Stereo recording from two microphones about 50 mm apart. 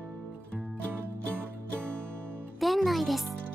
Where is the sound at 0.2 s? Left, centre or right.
Right.